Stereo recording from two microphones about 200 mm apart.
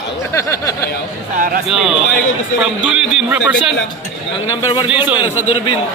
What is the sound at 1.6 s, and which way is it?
A man's voice, centre (ahead or behind).